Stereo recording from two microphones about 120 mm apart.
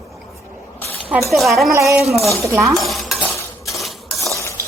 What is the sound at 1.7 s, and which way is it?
Speech, 25° right (ahead or behind).